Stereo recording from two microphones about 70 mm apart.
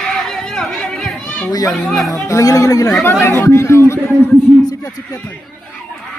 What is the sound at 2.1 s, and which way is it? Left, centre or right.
Speech, left.